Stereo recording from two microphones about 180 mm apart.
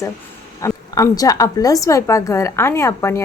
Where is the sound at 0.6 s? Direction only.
15° left (ahead or behind).